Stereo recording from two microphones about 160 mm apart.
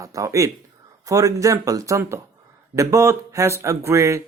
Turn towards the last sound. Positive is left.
turn(degrees=-20)  # may be behind; listen again after turning